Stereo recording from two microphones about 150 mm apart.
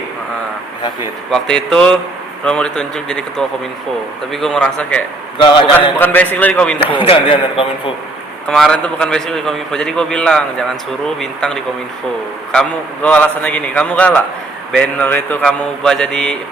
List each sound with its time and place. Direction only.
1.3 s a man's voice: 5° left (ahead or behind)
5.4 s a man's voice: 35° left (ahead or behind)
6.0 s a man's voice: 10° left (ahead or behind)
7.0 s a man's voice: 35° left (ahead or behind)
8.4 s a man's voice: 5° left (ahead or behind)